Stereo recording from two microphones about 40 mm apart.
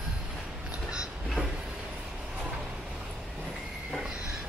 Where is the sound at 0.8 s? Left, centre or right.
Centre.